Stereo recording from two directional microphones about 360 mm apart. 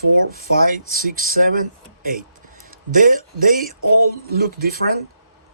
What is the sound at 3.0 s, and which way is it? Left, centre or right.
Speech, right.